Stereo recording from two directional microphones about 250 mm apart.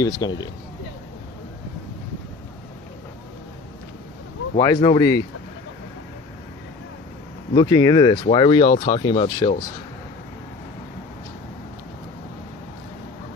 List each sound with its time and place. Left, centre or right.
0.0 s speech: centre
4.6 s speech: centre
7.5 s speech: centre